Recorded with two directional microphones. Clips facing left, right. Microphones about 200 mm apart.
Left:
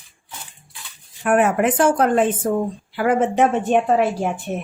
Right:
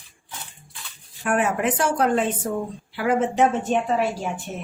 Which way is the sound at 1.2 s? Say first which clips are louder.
Left 5 dB; 55° left (ahead or behind).